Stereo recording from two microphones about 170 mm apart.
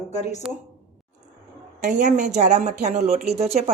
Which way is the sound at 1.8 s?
45° right (ahead or behind).